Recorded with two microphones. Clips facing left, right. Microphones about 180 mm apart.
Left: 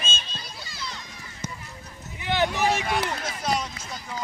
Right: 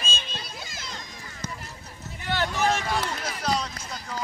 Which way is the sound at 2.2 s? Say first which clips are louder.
Left 2 dB; 15° left (ahead or behind).